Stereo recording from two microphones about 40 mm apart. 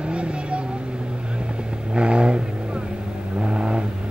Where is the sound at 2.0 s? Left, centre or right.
Right.